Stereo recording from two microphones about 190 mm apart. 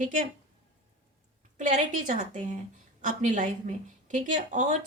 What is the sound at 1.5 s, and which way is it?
Speech, 40° right (ahead or behind).